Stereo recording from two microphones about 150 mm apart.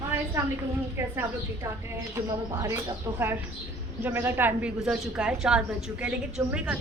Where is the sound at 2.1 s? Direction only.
20° right (ahead or behind).